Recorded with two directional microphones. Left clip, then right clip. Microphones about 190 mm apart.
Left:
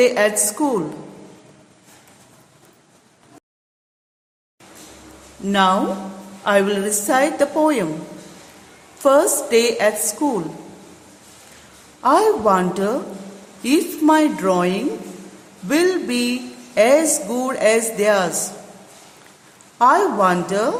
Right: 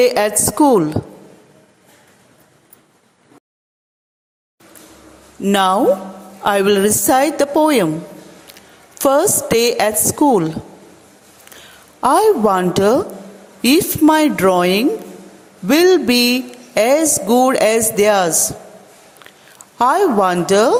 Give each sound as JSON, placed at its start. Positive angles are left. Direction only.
{"t": 0.0, "sound": "a woman's voice", "side_deg": -45}
{"t": 5.5, "sound": "a woman's voice", "side_deg": -50}
{"t": 9.0, "sound": "a woman's voice", "side_deg": -45}
{"t": 11.9, "sound": "a woman's voice", "side_deg": -45}
{"t": 19.8, "sound": "a woman's voice", "side_deg": -45}